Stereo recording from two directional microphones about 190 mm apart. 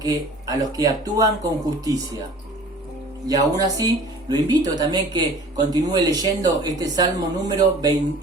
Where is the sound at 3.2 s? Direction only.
20° right (ahead or behind).